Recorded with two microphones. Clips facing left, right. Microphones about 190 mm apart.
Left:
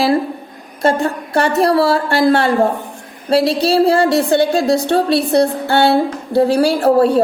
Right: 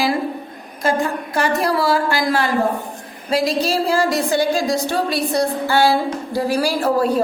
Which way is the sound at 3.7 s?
65° left (ahead or behind).